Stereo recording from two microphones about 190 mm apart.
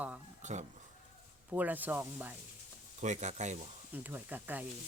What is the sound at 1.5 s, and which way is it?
Speech, 10° right (ahead or behind).